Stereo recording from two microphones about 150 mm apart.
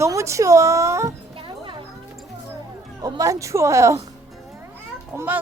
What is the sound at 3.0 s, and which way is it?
Speech, 25° right (ahead or behind).